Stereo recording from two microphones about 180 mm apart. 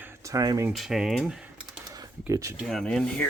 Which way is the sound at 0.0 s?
15° right (ahead or behind).